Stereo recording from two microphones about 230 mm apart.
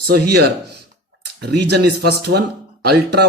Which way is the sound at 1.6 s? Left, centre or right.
Right.